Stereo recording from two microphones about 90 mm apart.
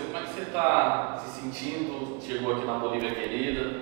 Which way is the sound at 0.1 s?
15° right (ahead or behind).